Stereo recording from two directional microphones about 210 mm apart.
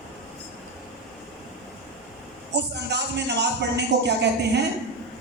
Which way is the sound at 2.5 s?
55° right (ahead or behind).